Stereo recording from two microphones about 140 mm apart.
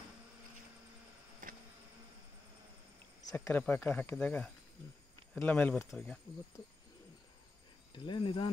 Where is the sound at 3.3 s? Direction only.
20° left (ahead or behind).